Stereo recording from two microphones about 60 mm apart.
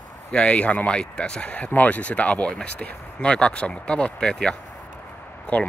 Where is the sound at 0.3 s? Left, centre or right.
Left.